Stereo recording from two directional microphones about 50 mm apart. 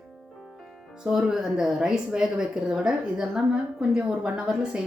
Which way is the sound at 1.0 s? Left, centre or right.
Centre.